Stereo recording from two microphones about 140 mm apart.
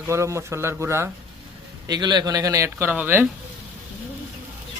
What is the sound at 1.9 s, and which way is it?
A man's voice, 30° right (ahead or behind).